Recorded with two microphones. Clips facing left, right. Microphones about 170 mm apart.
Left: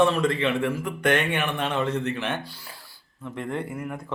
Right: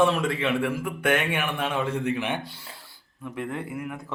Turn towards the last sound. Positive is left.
turn(degrees=0)  # may be behind; listen again after turning